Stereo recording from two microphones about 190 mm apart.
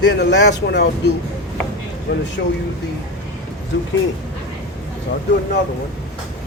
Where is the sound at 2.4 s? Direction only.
65° left (ahead or behind).